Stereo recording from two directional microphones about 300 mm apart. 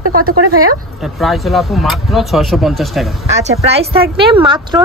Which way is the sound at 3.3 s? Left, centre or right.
Right.